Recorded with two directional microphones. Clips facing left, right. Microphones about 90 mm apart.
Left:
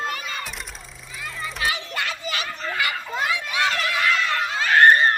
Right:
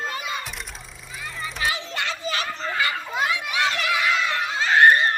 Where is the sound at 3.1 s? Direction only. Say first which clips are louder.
Even; 15° right (ahead or behind).